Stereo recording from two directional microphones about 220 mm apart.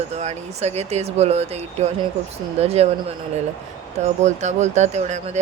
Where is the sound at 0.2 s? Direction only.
30° right (ahead or behind).